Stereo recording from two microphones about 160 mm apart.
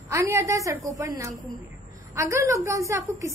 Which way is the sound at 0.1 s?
20° right (ahead or behind).